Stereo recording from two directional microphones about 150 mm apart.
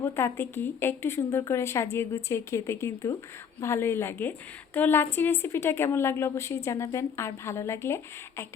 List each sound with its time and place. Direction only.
0.0 s a woman's voice: 15° left (ahead or behind)